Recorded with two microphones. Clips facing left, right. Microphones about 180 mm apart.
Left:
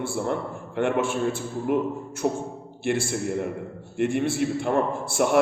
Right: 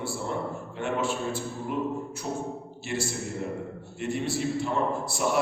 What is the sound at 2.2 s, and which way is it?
A man's voice, 55° left (ahead or behind).